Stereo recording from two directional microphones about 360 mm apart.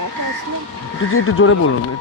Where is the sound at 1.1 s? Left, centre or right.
Left.